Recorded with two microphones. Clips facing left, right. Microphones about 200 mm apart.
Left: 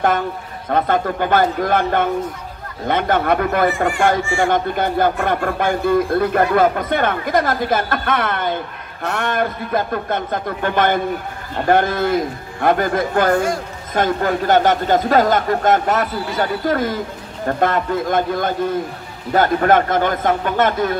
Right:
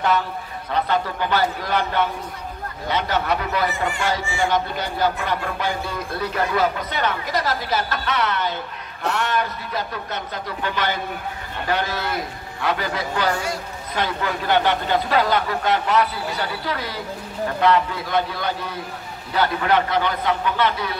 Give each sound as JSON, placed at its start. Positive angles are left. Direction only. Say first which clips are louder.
{"t": 0.7, "sound": "speech", "louder": "left 5 dB", "side_deg": 50}